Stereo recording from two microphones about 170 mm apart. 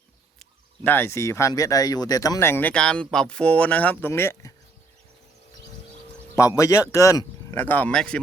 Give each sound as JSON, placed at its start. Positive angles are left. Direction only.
{"t": 0.9, "sound": "speech", "side_deg": 15}
{"t": 6.6, "sound": "speech", "side_deg": 20}